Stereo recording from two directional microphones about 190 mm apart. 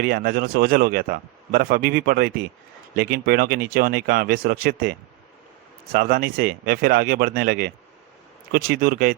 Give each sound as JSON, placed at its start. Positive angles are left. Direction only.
{"t": 0.0, "sound": "a man's voice", "side_deg": -50}